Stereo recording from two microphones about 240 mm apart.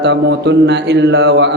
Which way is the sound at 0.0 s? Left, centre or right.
Right.